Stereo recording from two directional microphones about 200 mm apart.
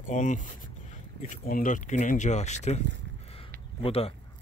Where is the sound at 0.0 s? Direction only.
40° left (ahead or behind).